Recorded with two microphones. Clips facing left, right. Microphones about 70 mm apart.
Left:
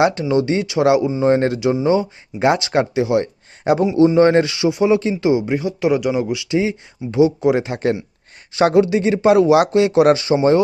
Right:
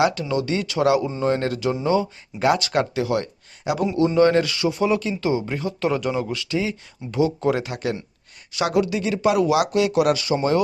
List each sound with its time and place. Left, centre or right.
0.0 s speech: left
3.6 s speech: left
3.9 s speech: left